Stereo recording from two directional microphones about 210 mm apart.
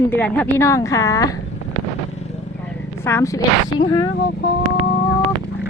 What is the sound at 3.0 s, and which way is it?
Speech, 10° left (ahead or behind).